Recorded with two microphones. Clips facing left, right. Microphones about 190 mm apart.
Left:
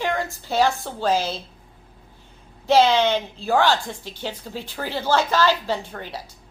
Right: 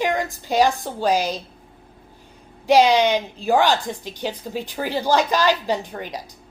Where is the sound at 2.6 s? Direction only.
15° right (ahead or behind).